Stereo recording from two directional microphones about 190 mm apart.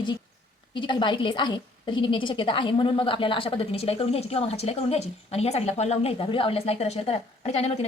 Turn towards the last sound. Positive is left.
turn(degrees=35)  # may be behind; listen again after turning